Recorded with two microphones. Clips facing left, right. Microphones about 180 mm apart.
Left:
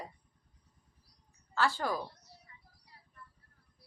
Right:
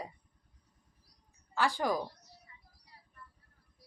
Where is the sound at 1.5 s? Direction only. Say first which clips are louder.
Right 1 dB; 15° right (ahead or behind).